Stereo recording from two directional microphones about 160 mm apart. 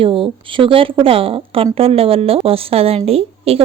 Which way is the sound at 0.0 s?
35° right (ahead or behind).